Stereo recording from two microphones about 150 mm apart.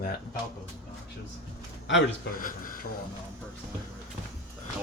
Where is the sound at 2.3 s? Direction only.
65° left (ahead or behind).